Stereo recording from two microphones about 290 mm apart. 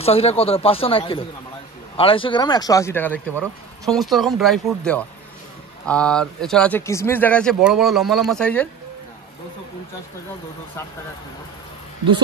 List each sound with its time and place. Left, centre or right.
0.0 s speech: centre